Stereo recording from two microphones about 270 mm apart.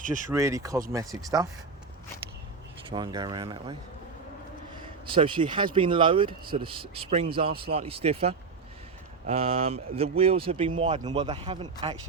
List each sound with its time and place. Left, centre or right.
0.3 s speech: centre
2.9 s speech: centre